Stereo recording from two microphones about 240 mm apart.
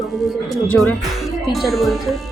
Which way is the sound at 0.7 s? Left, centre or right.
Centre.